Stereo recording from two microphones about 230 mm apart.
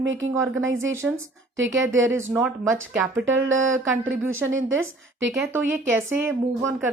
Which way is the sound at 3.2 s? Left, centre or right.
Right.